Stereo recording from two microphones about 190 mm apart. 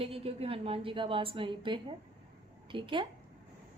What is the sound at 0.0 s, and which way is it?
Speech, 30° right (ahead or behind).